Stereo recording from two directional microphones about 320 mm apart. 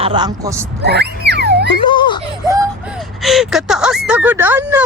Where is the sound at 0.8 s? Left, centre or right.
Right.